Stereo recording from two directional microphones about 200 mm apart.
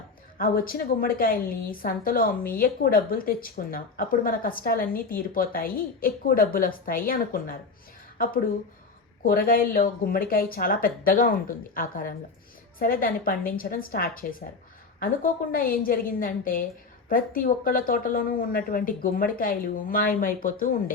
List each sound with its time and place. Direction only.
0.3 s a woman's voice: 45° left (ahead or behind)
9.2 s a woman's voice: 45° left (ahead or behind)